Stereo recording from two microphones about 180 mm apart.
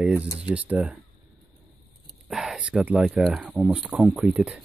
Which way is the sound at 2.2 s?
5° right (ahead or behind).